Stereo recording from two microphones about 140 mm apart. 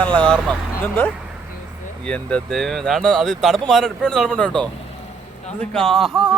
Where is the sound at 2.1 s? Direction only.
10° left (ahead or behind).